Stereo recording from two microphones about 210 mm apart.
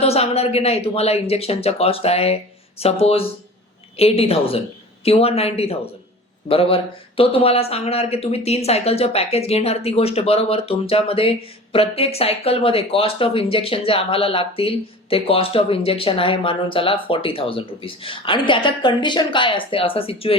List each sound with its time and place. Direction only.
0.0 s speech: 30° left (ahead or behind)